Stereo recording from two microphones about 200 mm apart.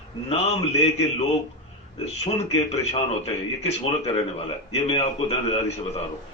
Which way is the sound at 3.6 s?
30° left (ahead or behind).